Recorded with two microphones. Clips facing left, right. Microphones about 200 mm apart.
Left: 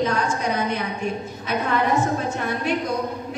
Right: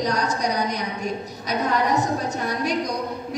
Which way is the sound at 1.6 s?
40° right (ahead or behind).